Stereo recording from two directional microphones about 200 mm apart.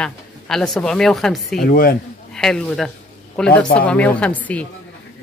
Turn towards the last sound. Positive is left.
turn(degrees=5)  # may be behind; listen again after turning